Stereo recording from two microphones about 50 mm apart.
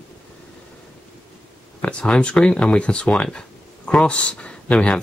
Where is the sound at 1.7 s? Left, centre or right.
Left.